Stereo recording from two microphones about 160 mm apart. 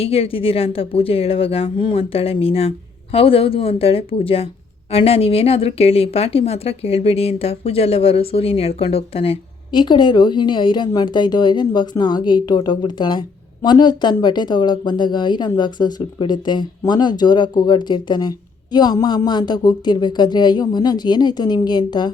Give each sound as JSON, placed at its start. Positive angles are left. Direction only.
{"t": 0.0, "sound": "speech", "side_deg": 35}